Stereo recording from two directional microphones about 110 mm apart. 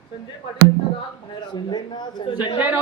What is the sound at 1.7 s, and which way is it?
Speech, 40° left (ahead or behind).